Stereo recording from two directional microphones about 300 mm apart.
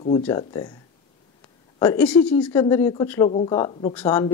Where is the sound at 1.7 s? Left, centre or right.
Centre.